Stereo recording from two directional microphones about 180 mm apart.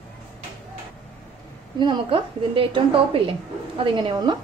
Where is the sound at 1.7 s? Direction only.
30° right (ahead or behind).